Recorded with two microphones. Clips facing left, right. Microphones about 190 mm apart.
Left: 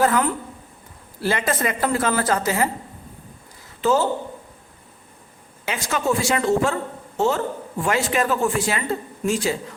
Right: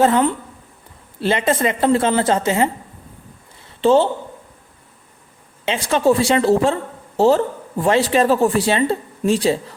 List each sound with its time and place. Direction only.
0.0 s a woman's voice: 25° right (ahead or behind)
3.8 s speech: 30° right (ahead or behind)
5.6 s a woman's voice: 30° right (ahead or behind)